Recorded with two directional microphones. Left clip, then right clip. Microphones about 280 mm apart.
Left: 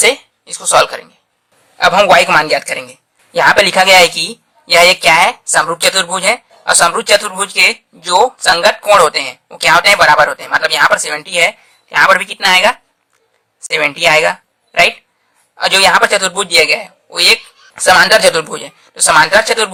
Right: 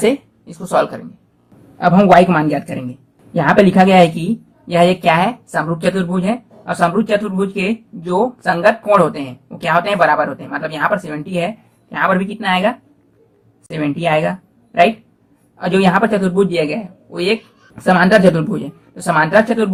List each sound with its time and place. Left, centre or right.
0.0 s a woman's voice: left